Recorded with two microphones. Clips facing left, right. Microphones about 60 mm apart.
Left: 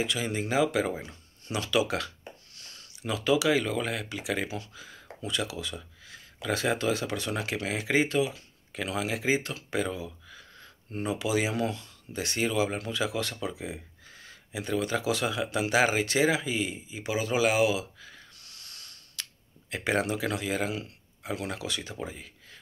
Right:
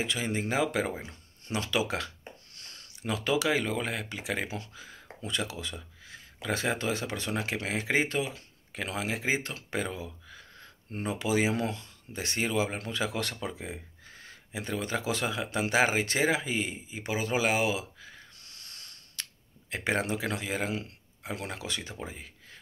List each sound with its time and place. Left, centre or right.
0.0 s speech: right